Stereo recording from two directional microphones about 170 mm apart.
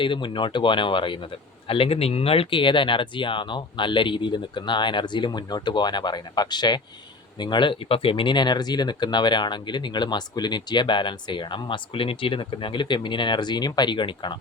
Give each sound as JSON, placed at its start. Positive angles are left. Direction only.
{"t": 0.0, "sound": "speech", "side_deg": 30}